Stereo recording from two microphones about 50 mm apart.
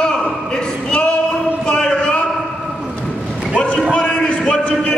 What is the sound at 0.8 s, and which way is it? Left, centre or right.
Singing, left.